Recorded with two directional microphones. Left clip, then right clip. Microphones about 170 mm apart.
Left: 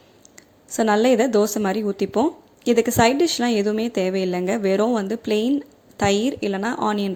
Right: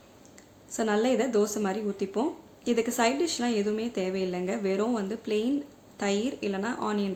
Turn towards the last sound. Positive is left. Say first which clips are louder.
# left 8 dB
turn(degrees=45)  # may be behind; listen again after turning